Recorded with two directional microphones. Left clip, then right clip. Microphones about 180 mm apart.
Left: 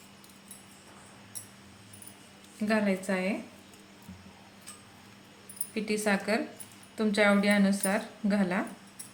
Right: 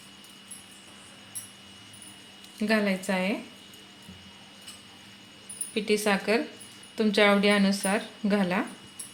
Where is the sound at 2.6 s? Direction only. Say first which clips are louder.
Right 3 dB; 30° right (ahead or behind).